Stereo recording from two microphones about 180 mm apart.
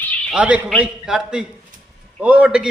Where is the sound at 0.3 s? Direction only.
5° right (ahead or behind).